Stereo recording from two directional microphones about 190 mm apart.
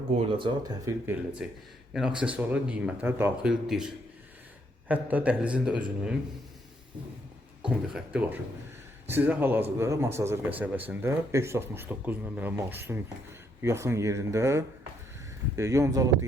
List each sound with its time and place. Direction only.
0.2 s a man's voice: 25° right (ahead or behind); by 6.1 s 5° right (ahead or behind)
7.9 s a man's voice: 5° right (ahead or behind)